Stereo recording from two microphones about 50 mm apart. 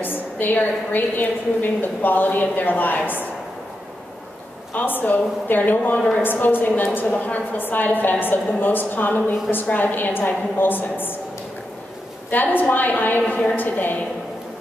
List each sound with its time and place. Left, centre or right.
0.0 s a woman's voice: left
4.7 s a woman's voice: left
5.9 s a woman's voice: left
6.2 s a woman's voice: left
12.3 s a woman's voice: left
13.3 s a woman's voice: left
13.6 s a woman's voice: left